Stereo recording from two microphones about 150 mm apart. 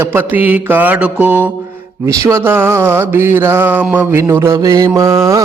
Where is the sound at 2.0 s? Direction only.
20° right (ahead or behind).